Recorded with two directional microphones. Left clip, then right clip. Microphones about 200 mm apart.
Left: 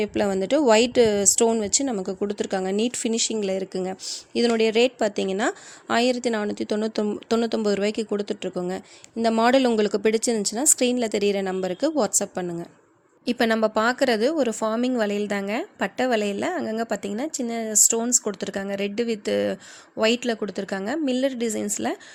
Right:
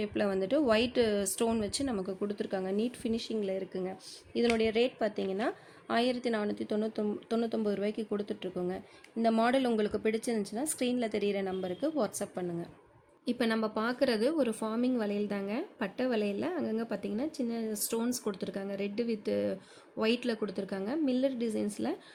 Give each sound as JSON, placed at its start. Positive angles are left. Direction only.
{"t": 0.0, "sound": "speech", "side_deg": 35}